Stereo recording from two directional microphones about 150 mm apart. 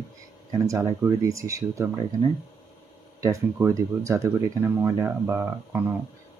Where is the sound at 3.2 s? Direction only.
20° right (ahead or behind).